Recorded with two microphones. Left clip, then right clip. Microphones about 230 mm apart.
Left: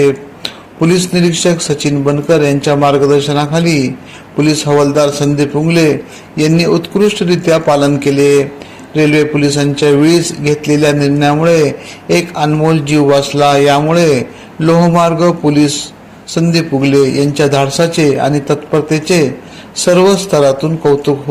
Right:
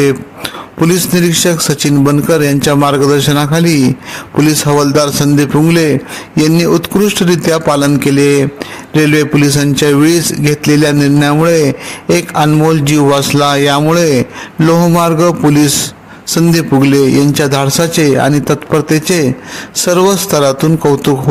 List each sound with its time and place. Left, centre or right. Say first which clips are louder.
0.4 s speech: right 1 dB; right